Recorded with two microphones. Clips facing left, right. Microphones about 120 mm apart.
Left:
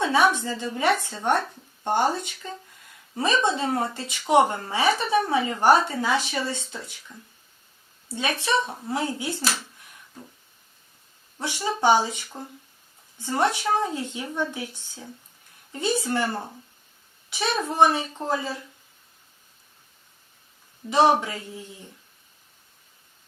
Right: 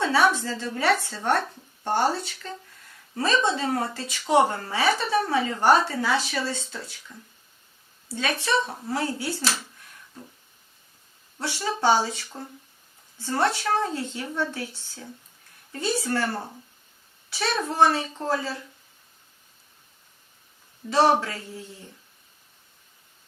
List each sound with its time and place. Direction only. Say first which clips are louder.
0.0 s speech: left 1 dB; 15° left (ahead or behind)
8.0 s a woman's voice: even; 15° left (ahead or behind)
9.4 s speech: even; centre (ahead or behind)
11.3 s speech: left 1 dB; 15° left (ahead or behind)
20.8 s speech: even; 30° left (ahead or behind)
21.2 s speech: even; 15° left (ahead or behind)